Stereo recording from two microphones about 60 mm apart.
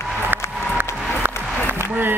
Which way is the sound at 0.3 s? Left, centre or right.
Right.